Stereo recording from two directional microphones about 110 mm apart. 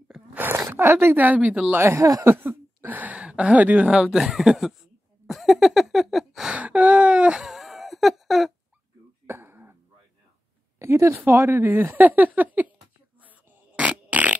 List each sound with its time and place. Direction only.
0.1 s gasp: 15° right (ahead or behind)
0.6 s speech: 25° right (ahead or behind)
2.3 s speech: 20° right (ahead or behind); by 4.7 s centre (ahead or behind)
5.2 s a sound: centre (ahead or behind)
9.2 s cough: 20° right (ahead or behind)
10.8 s speech: 25° right (ahead or behind)
13.7 s fart: 10° right (ahead or behind)